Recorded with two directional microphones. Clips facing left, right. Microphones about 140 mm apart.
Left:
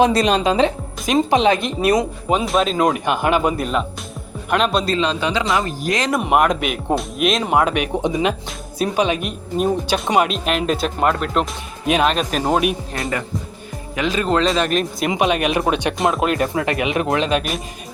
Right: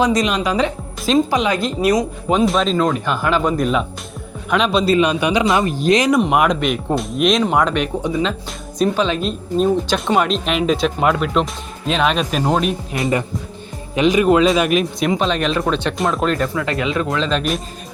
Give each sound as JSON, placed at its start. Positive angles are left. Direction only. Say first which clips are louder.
{"t": 0.0, "sound": "speech", "louder": "left 2 dB", "side_deg": 30}
{"t": 2.3, "sound": "speech", "louder": "right 2 dB", "side_deg": 0}
{"t": 3.6, "sound": "speech", "louder": "right 3 dB", "side_deg": 0}
{"t": 4.9, "sound": "speech", "louder": "right 4 dB", "side_deg": -15}
{"t": 6.1, "sound": "speech", "louder": "right 2 dB", "side_deg": 0}
{"t": 12.4, "sound": "speech", "louder": "left 1 dB", "side_deg": 10}
{"t": 13.9, "sound": "speech", "louder": "right 6 dB", "side_deg": -20}
{"t": 15.1, "sound": "speech", "louder": "left 2 dB", "side_deg": 15}
{"t": 16.6, "sound": "speech", "louder": "even", "side_deg": 20}